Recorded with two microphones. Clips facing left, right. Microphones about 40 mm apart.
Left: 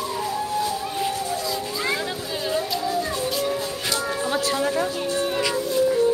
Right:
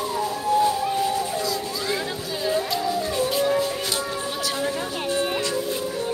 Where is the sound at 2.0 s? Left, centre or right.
Centre.